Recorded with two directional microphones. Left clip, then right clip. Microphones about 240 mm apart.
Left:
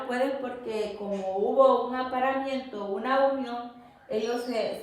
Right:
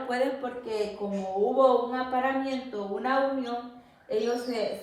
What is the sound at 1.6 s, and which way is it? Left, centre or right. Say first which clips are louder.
A woman's voice: left 2 dB; centre.